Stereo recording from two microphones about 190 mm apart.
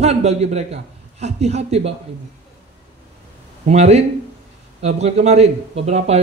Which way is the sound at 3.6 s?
35° right (ahead or behind).